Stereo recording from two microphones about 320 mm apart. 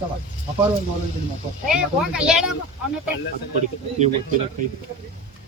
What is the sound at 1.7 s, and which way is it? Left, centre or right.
Speech, centre.